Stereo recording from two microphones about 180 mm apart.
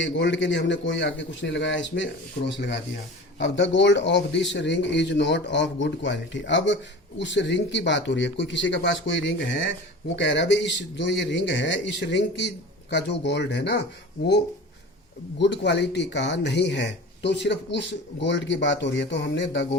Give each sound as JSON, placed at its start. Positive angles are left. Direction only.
{"t": 0.0, "sound": "a man's voice", "side_deg": 90}
{"t": 3.3, "sound": "a man's voice", "side_deg": 90}
{"t": 15.4, "sound": "speech", "side_deg": 70}